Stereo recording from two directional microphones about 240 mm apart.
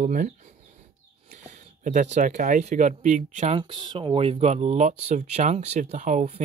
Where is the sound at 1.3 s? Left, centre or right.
Right.